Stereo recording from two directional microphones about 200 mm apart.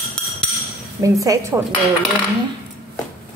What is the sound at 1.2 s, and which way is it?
Speech, 15° right (ahead or behind).